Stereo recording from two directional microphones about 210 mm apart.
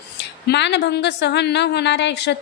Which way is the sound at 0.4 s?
55° left (ahead or behind).